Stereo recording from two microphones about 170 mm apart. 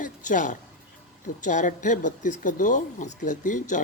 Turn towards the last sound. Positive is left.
turn(degrees=50)  # may be behind; listen again after turning